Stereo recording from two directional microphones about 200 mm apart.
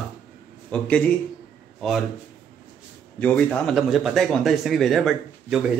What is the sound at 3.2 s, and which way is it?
A man's voice, 5° left (ahead or behind).